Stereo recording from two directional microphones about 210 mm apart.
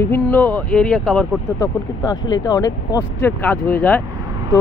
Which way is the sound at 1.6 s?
20° left (ahead or behind).